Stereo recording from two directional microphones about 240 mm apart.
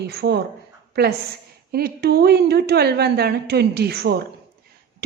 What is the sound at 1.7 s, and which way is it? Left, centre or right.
Speech, right.